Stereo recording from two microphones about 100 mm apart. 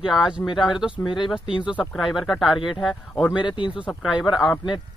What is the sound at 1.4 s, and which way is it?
Speech, 55° left (ahead or behind).